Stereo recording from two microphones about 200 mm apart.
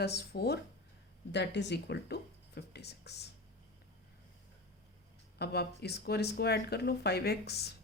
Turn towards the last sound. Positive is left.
turn(degrees=55)  # may be behind; listen again after turning